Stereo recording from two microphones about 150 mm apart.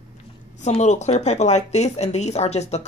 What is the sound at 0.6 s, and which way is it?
Speech, 50° left (ahead or behind).